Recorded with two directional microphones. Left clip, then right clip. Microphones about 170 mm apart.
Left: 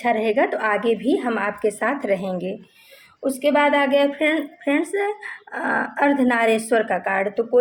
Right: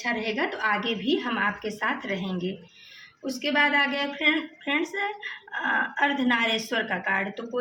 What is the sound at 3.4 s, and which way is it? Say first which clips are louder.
Speech: left 5 dB; 55° left (ahead or behind).